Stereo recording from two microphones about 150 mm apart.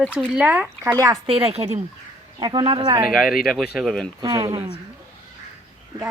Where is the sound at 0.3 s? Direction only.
10° right (ahead or behind).